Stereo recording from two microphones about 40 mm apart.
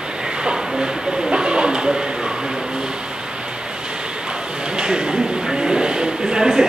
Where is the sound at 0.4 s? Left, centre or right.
Centre.